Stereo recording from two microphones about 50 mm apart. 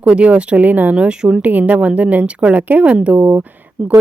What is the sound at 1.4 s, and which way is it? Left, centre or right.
A woman's voice, right.